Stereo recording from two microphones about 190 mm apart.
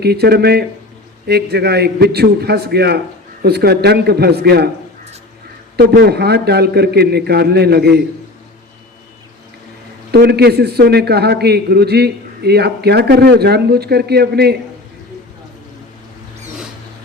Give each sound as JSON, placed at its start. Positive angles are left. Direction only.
{"t": 0.0, "sound": "a man's voice", "side_deg": -55}
{"t": 5.7, "sound": "a man's voice", "side_deg": -55}
{"t": 10.1, "sound": "a man's voice", "side_deg": -55}